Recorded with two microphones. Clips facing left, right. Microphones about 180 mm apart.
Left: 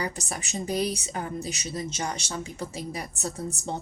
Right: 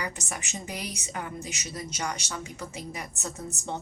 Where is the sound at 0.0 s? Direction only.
35° left (ahead or behind).